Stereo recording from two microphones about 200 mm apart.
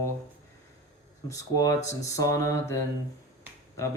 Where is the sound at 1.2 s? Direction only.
15° left (ahead or behind).